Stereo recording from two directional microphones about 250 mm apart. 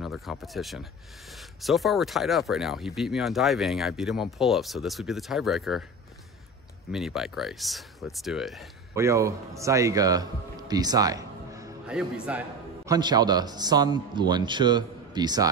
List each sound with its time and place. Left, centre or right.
0.0 s speech: centre
6.9 s speech: centre
8.9 s a man's voice: centre